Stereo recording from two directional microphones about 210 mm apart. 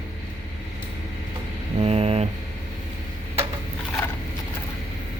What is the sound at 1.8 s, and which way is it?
Speech, 30° right (ahead or behind).